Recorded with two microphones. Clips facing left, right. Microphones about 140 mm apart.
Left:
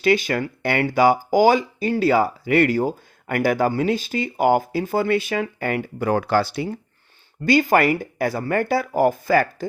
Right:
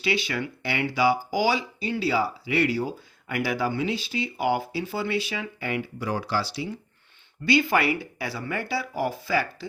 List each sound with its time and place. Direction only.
0.0 s speech: 50° left (ahead or behind)